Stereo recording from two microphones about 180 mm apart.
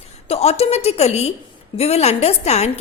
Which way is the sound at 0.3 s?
35° left (ahead or behind).